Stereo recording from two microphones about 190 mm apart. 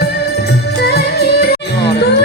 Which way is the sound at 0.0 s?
60° left (ahead or behind).